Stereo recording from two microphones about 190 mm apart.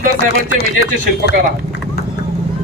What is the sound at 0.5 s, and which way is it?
Speech, 60° left (ahead or behind).